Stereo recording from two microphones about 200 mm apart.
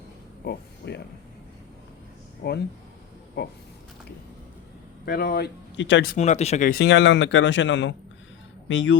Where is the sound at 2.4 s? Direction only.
50° left (ahead or behind).